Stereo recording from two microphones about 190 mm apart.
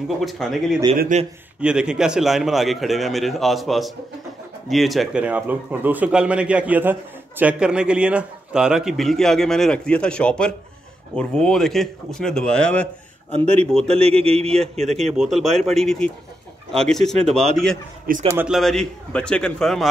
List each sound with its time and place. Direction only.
0.2 s a man's voice: centre (ahead or behind)
0.9 s speech: 45° right (ahead or behind)
1.6 s a man's voice: 5° right (ahead or behind)
13.8 s a man's voice: 30° right (ahead or behind)
15.1 s a man's voice: centre (ahead or behind)